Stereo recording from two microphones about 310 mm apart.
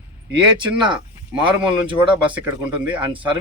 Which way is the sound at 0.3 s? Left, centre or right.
Centre.